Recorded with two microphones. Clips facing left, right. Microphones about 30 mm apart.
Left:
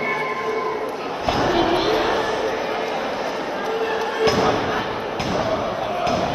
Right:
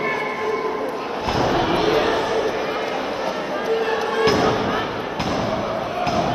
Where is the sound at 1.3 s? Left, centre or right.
Left.